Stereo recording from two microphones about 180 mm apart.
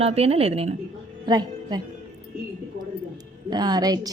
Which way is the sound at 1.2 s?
25° right (ahead or behind).